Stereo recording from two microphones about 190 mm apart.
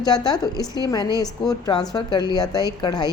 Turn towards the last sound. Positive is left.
turn(degrees=20)  # may be behind; listen again after turning